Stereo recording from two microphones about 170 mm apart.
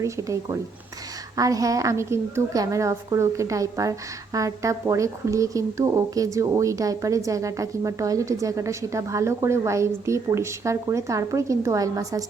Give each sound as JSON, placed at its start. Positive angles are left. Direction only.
{"t": 1.4, "sound": "a woman's voice", "side_deg": -20}